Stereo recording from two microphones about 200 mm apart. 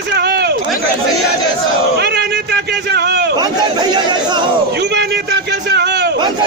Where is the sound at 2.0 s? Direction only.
55° right (ahead or behind).